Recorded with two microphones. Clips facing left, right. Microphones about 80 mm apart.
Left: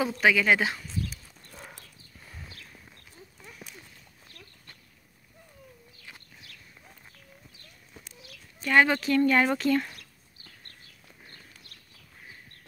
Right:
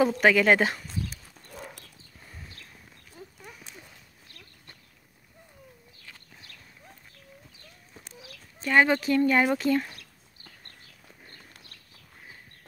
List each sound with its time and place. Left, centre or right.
0.0 s speech: right
8.6 s speech: right